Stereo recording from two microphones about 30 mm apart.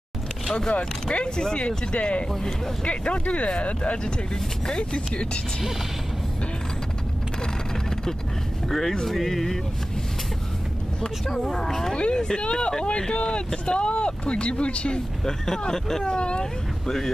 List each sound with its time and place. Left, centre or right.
1.1 s speech: left
8.6 s speech: centre
11.0 s speech: centre
11.9 s speech: left
15.2 s speech: centre
16.8 s speech: centre